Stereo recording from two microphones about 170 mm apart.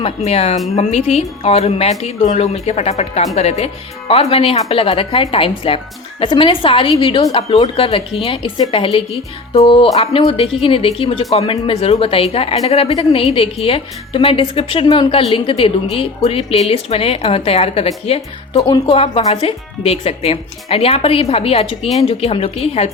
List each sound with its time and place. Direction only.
0.3 s a woman's voice: 40° left (ahead or behind)